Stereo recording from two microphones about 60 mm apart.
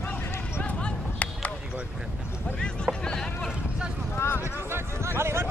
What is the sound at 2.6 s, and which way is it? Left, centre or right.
Speech, centre.